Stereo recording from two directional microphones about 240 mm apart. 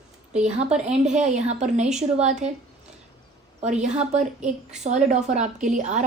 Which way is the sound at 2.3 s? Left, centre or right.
Centre.